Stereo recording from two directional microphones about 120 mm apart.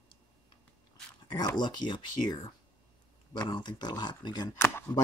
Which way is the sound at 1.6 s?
40° left (ahead or behind).